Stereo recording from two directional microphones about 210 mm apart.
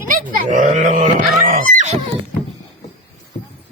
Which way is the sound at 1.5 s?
40° right (ahead or behind).